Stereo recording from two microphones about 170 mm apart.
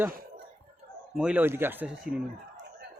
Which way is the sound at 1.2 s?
5° right (ahead or behind).